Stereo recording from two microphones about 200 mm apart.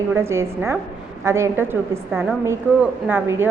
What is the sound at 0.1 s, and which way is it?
A woman's voice, 15° right (ahead or behind).